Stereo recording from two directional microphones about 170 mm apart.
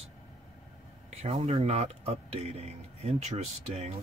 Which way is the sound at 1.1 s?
35° right (ahead or behind).